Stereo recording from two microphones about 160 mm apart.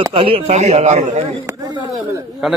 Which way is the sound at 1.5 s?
20° right (ahead or behind).